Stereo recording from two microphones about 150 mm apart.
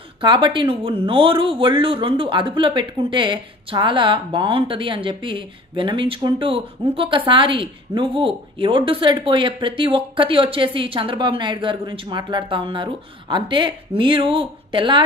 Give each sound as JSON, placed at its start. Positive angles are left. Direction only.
{"t": 0.2, "sound": "speech", "side_deg": -35}